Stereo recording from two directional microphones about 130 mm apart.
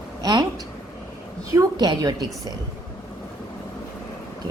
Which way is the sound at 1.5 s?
30° right (ahead or behind).